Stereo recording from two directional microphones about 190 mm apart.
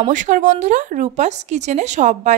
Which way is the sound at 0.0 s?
40° right (ahead or behind).